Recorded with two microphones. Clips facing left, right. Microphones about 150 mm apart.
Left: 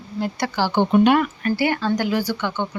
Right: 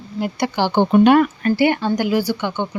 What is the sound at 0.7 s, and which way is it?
Speech, 40° right (ahead or behind).